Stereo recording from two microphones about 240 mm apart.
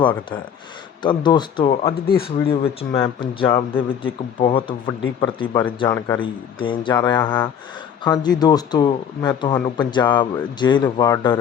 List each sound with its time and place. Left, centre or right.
0.0 s speech: centre
2.0 s speech: left
2.9 s speech: centre